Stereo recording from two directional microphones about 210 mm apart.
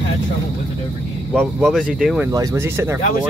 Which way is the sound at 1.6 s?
Centre (ahead or behind).